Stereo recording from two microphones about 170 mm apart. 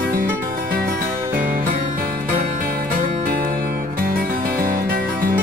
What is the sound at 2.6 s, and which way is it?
Music, 55° right (ahead or behind).